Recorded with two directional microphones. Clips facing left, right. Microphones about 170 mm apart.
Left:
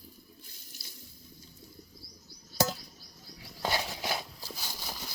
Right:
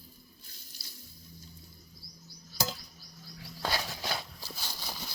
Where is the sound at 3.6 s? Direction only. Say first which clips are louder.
Left 2 dB; 20° left (ahead or behind).